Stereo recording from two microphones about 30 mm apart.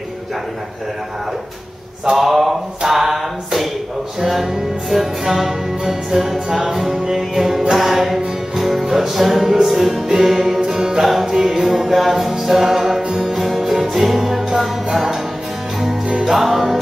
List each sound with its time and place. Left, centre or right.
2.1 s speech: centre
2.8 s music: centre
4.9 s speech: centre
5.9 s music: centre
9.8 s speech: centre
10.0 s music: centre
16.3 s music: centre